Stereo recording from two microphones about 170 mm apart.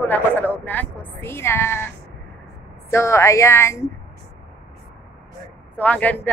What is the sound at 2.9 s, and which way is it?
Speech, 15° left (ahead or behind).